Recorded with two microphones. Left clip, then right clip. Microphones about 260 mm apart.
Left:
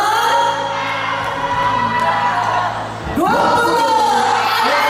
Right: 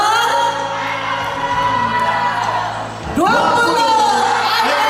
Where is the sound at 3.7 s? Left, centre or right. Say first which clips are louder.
Right 1 dB; centre.